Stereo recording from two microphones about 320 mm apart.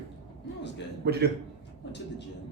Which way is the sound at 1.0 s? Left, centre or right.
Right.